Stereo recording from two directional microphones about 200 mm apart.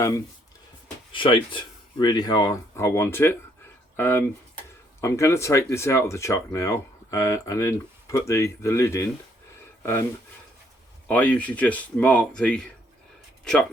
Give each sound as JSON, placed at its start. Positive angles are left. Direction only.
{"t": 1.1, "sound": "speech", "side_deg": 25}
{"t": 11.1, "sound": "speech", "side_deg": 5}